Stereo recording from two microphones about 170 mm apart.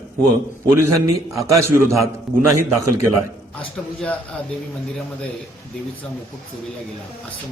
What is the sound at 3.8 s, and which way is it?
Speech, 5° left (ahead or behind).